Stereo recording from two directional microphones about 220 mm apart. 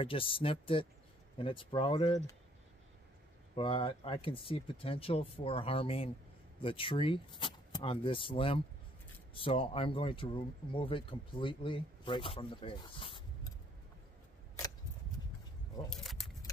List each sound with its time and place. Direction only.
0.0 s speech: 25° left (ahead or behind)
3.5 s speech: 25° left (ahead or behind)
15.9 s keys jangling: centre (ahead or behind)